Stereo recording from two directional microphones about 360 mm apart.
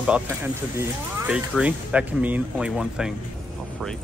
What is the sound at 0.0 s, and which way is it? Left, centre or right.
Speech, centre.